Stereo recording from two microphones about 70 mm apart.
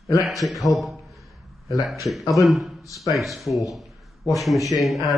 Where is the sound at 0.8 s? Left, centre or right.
Centre.